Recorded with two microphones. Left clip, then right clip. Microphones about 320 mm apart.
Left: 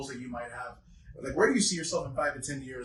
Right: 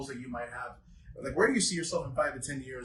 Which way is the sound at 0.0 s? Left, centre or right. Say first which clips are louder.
Even; centre.